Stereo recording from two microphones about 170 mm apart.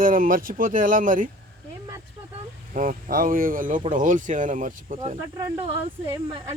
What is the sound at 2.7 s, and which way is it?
Speech, 55° right (ahead or behind).